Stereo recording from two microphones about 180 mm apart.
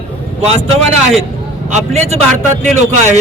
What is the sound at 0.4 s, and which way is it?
A man's voice, 35° right (ahead or behind).